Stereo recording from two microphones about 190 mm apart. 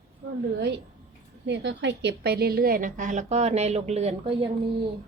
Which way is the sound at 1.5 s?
65° right (ahead or behind).